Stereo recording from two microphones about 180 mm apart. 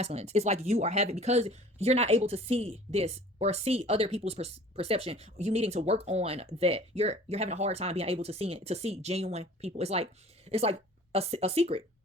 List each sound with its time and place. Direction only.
0.0 s speech: 35° right (ahead or behind)